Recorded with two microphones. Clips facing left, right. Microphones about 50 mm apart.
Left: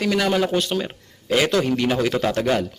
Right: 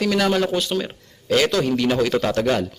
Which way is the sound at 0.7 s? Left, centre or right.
Centre.